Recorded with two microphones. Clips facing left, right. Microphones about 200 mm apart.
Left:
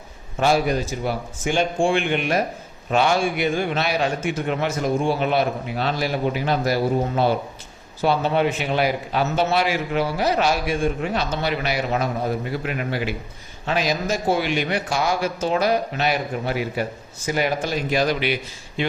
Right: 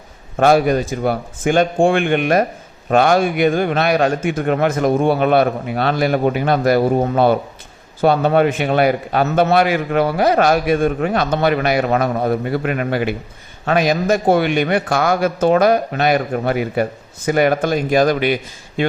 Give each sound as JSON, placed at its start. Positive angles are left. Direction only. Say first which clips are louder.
{"t": 0.3, "sound": "a man's voice", "louder": "right 6 dB", "side_deg": -55}